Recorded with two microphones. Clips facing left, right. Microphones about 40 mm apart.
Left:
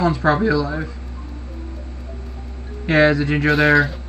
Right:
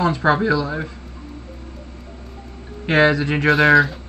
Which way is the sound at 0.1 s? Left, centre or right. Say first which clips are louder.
Even; right.